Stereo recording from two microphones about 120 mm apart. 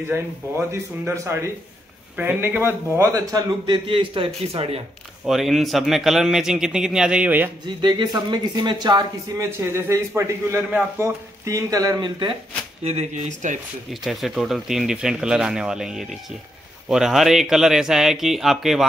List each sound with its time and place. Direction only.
0.1 s a man's voice: 20° right (ahead or behind); by 4.8 s 55° right (ahead or behind)
5.2 s a man's voice: centre (ahead or behind)
7.6 s a man's voice: 40° right (ahead or behind)
9.4 s a man's voice: 25° right (ahead or behind); by 12.4 s 40° right (ahead or behind)
12.8 s speech: 60° right (ahead or behind); by 13.6 s 80° right
14.0 s a man's voice: centre (ahead or behind)